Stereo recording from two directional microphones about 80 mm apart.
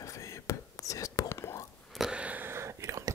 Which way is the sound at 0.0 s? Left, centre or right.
Left.